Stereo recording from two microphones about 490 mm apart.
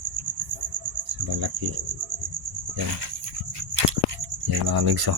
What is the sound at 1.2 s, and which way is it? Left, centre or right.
Cricket, right.